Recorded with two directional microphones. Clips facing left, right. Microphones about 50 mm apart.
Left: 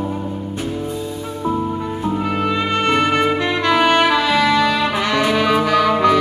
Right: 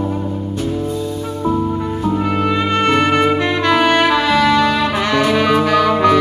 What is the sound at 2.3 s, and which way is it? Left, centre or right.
Music, right.